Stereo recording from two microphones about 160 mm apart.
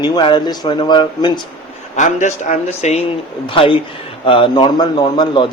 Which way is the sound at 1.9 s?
50° left (ahead or behind).